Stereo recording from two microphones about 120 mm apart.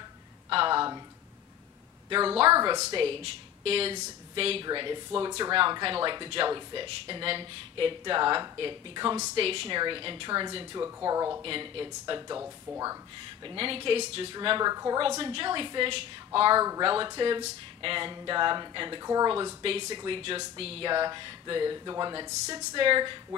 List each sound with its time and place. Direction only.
0.5 s a sound: 45° right (ahead or behind)
2.0 s speech: 45° right (ahead or behind)
4.6 s speech: 40° right (ahead or behind)
10.8 s speech: 30° right (ahead or behind)
11.4 s speech: 50° right (ahead or behind)
12.4 s speech: 25° right (ahead or behind)
13.5 s speech: 50° right (ahead or behind)
14.3 s speech: 40° right (ahead or behind)
14.7 s speech: 30° right (ahead or behind)
15.0 s speech: 50° right (ahead or behind)
16.5 s speech: 30° right (ahead or behind)
16.8 s speech: 45° right (ahead or behind)
19.3 s speech: 45° right (ahead or behind)
20.9 s speech: 40° right (ahead or behind)